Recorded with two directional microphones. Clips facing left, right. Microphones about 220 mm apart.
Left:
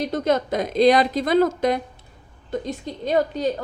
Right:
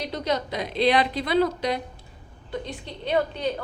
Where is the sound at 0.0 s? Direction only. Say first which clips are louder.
Left 6 dB; 50° left (ahead or behind).